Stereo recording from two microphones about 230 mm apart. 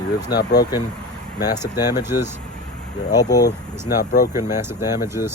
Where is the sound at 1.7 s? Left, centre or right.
Centre.